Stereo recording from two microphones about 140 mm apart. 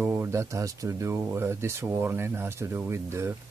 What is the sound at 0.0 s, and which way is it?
Speech, 15° right (ahead or behind).